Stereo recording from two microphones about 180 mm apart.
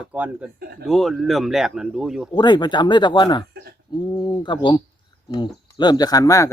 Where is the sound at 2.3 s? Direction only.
25° left (ahead or behind).